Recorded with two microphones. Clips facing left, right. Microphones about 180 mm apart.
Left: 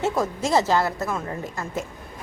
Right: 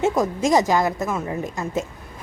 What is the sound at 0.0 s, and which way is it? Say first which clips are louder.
A woman's voice: right 4 dB; 15° right (ahead or behind).